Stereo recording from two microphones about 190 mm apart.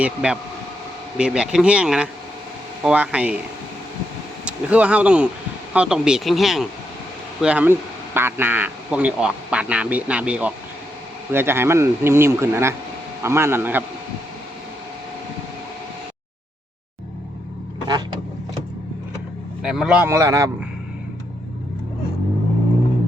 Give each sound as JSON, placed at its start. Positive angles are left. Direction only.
{"t": 0.0, "sound": "speech", "side_deg": -5}
{"t": 4.4, "sound": "speech", "side_deg": -5}
{"t": 17.8, "sound": "vehicle", "side_deg": -20}
{"t": 19.6, "sound": "a man's voice", "side_deg": -5}